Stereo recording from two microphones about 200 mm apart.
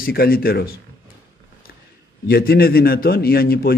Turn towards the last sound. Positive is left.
turn(degrees=50)  # may be behind; listen again after turning